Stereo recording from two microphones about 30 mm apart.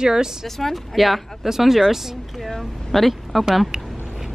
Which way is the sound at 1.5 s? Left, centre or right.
Centre.